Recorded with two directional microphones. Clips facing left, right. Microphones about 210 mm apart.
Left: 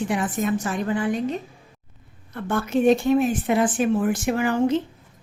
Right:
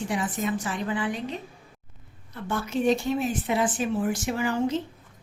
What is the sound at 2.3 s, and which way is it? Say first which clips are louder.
A woman's voice: left 5 dB; 55° left (ahead or behind).